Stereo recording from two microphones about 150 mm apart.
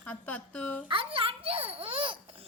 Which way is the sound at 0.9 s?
35° right (ahead or behind).